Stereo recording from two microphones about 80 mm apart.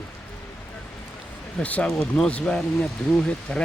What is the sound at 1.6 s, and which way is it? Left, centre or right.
Speech, centre.